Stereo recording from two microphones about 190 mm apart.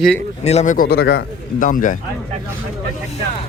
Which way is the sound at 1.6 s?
45° left (ahead or behind).